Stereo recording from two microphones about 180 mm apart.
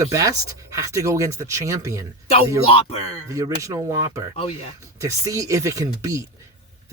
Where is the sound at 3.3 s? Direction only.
20° right (ahead or behind).